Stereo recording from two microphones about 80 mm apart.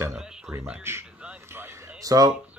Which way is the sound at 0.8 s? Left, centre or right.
Right.